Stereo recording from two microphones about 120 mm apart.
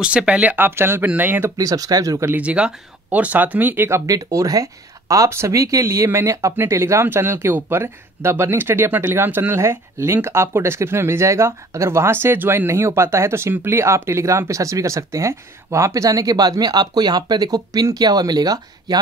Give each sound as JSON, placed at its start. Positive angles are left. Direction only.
{"t": 0.0, "sound": "speech", "side_deg": -10}
{"t": 1.6, "sound": "speech", "side_deg": -30}
{"t": 2.3, "sound": "speech", "side_deg": -10}